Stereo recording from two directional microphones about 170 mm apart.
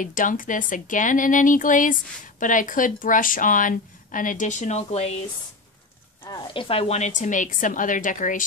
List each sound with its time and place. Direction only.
0.0 s speech: 50° left (ahead or behind)
6.2 s speech: 30° left (ahead or behind); by 8.5 s 50° left (ahead or behind)